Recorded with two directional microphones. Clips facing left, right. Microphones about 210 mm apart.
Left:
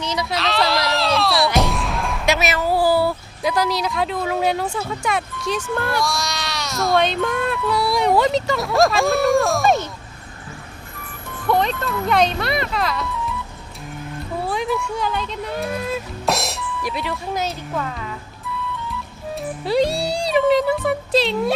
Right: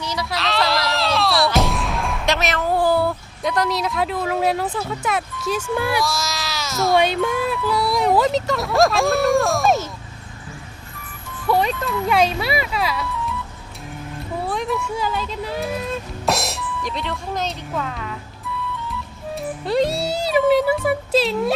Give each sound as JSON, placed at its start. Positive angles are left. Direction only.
{"t": 0.0, "sound": "a sound", "side_deg": 20}
{"t": 0.3, "sound": "a sound", "side_deg": 0}
{"t": 1.5, "sound": "speech", "side_deg": 0}
{"t": 11.4, "sound": "speech", "side_deg": -5}
{"t": 14.4, "sound": "speech", "side_deg": 0}
{"t": 19.4, "sound": "speech", "side_deg": 0}